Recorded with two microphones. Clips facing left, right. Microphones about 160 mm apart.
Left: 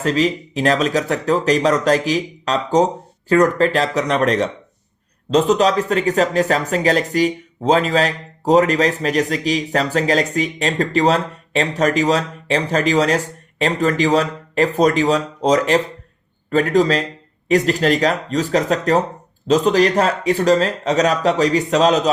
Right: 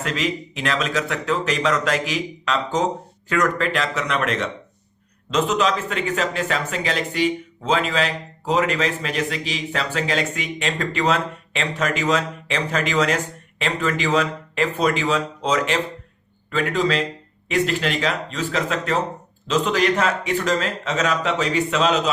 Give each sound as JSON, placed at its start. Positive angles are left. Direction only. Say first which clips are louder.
{"t": 0.0, "sound": "speech", "louder": "left 7 dB", "side_deg": 35}